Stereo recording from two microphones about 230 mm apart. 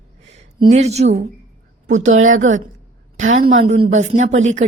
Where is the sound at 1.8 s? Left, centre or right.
Right.